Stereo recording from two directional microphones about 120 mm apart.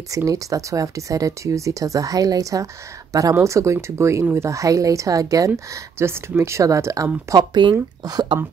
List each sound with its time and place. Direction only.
0.1 s speech: 30° right (ahead or behind)